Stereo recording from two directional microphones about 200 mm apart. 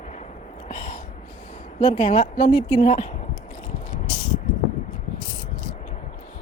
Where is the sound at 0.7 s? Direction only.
40° left (ahead or behind).